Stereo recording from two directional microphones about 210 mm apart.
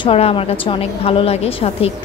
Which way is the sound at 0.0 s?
25° left (ahead or behind).